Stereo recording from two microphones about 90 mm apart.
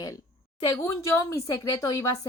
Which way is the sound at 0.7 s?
35° left (ahead or behind).